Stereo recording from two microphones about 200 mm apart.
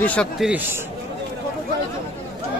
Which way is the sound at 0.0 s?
5° left (ahead or behind).